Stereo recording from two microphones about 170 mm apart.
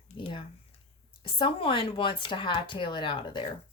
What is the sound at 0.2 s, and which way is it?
Speech, 30° left (ahead or behind).